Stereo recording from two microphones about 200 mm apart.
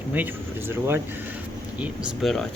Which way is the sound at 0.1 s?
10° right (ahead or behind).